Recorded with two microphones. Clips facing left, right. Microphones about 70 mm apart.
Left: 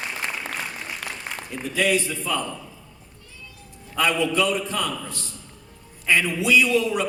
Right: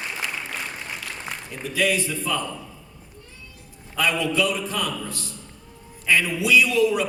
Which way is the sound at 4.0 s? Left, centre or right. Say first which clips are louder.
Left 1 dB; left.